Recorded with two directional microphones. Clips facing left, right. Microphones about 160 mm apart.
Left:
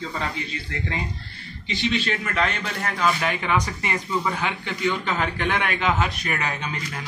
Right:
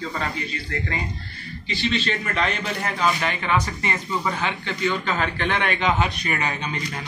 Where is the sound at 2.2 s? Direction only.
Centre (ahead or behind).